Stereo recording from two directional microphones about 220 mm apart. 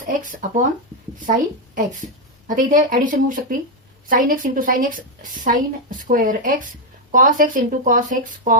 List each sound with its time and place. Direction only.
0.0 s a woman's voice: 35° right (ahead or behind)